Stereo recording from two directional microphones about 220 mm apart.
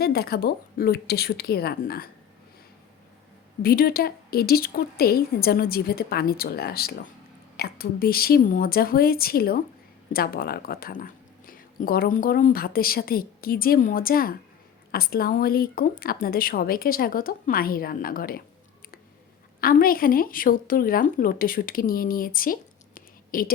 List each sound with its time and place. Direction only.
0.0 s speech: 45° left (ahead or behind)
3.6 s speech: 45° left (ahead or behind)
19.6 s speech: 40° left (ahead or behind)
23.0 s a sound: 40° left (ahead or behind)